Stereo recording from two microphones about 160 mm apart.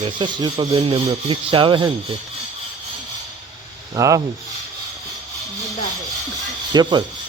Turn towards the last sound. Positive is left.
turn(degrees=-25)  # may be behind; listen again after turning